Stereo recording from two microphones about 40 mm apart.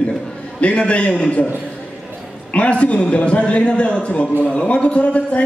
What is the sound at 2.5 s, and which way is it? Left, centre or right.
A man's voice, left.